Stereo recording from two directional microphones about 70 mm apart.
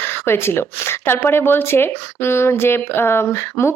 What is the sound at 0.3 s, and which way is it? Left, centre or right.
Speech, left.